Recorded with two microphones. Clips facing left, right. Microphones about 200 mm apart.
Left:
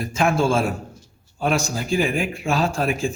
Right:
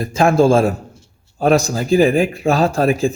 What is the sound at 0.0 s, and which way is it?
A man's voice, 35° right (ahead or behind).